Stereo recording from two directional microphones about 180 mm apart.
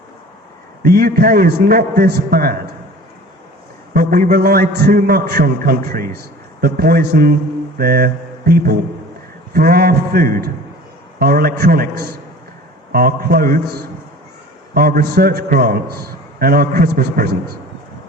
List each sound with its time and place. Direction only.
0.8 s a man's voice: 55° right (ahead or behind)
3.9 s a man's voice: 55° right (ahead or behind)
7.8 s mantra: 55° right (ahead or behind)
9.5 s a man's voice: 55° right (ahead or behind)